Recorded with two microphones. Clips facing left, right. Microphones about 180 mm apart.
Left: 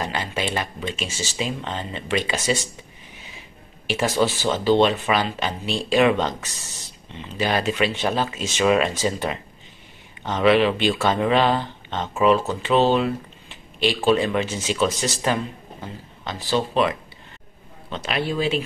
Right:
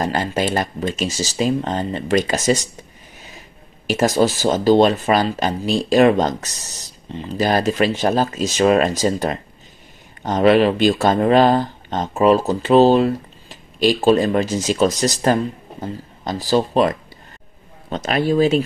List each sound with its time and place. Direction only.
0.0 s speech: 40° right (ahead or behind)